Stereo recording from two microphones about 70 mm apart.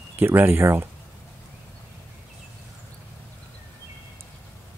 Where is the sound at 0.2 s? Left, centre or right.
Right.